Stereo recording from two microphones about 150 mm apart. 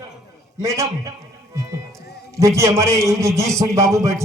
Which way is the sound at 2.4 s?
20° right (ahead or behind).